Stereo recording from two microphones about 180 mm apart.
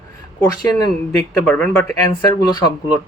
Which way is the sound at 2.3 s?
25° left (ahead or behind).